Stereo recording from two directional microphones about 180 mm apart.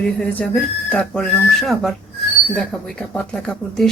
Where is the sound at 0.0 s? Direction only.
5° left (ahead or behind).